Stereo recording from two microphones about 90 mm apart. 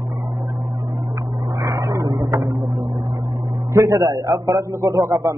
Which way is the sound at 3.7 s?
40° right (ahead or behind).